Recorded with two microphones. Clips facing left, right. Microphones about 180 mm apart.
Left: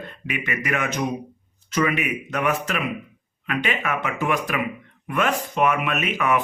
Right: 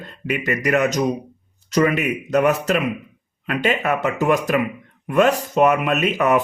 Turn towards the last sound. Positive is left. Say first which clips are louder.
# right 5 dB
turn(degrees=-40)  # may be behind; listen again after turning